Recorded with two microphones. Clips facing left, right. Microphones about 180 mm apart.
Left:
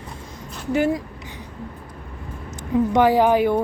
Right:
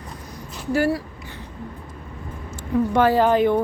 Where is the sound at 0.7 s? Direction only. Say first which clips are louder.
Even; 20° left (ahead or behind).